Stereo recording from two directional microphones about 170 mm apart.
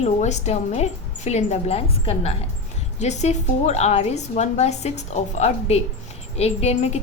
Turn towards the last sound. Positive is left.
turn(degrees=40)  # may be behind; listen again after turning